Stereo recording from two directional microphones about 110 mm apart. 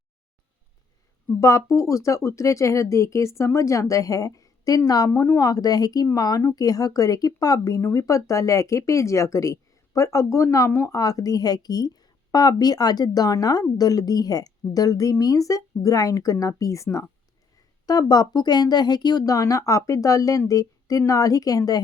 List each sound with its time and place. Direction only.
1.4 s speech: 30° left (ahead or behind)